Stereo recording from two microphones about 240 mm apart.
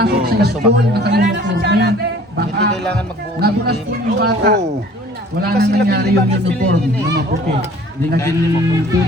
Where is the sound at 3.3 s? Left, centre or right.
Right.